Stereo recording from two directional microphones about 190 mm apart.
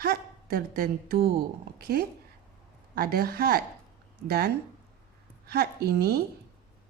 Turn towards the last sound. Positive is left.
turn(degrees=-55)  # may be behind; listen again after turning